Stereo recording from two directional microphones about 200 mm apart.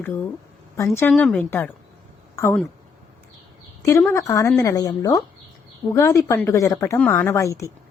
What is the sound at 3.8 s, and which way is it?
Speech, 15° left (ahead or behind).